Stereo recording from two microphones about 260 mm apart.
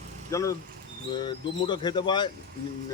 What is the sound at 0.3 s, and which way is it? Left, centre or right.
Speech, centre.